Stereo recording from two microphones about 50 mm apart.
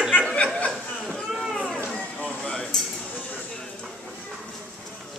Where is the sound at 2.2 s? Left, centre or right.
Centre.